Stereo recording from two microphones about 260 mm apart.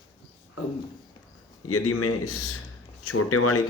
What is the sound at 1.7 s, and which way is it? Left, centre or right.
Speech, left.